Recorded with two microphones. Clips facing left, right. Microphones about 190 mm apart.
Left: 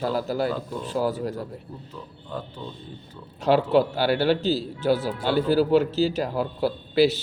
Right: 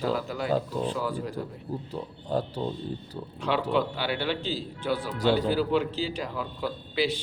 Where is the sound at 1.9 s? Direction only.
40° right (ahead or behind).